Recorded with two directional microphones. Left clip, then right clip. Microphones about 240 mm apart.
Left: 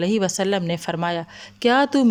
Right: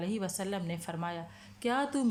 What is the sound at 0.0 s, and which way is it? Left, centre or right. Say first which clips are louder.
Speech: left 15 dB; left.